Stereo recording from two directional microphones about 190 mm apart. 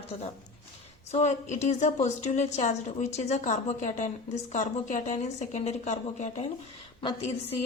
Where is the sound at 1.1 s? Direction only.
35° left (ahead or behind).